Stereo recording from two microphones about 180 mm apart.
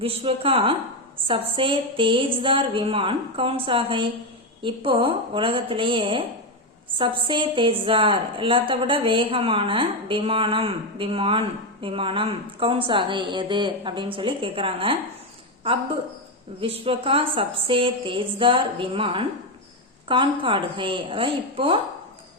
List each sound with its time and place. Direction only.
0.0 s a woman's voice: 30° right (ahead or behind)
16.6 s a woman's voice: 30° right (ahead or behind)